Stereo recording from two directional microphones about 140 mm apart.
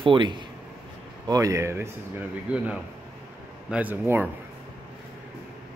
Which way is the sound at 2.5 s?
10° right (ahead or behind).